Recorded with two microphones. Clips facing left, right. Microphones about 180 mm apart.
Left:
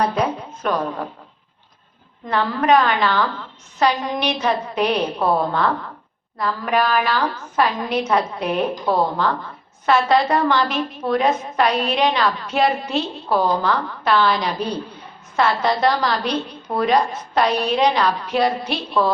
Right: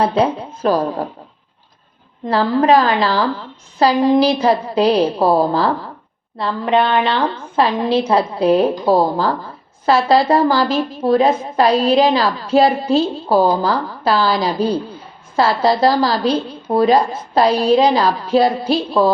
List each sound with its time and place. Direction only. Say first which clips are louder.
0.0 s a woman's voice: right 5 dB; 30° right (ahead or behind)
2.2 s a woman's voice: right 5 dB; 30° right (ahead or behind)